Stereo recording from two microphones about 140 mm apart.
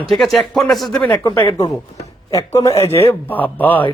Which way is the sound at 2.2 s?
25° left (ahead or behind).